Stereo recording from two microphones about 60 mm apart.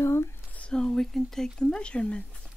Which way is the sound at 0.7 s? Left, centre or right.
Centre.